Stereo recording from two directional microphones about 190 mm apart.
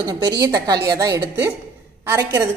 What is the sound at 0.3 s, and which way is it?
A woman's voice, 20° right (ahead or behind).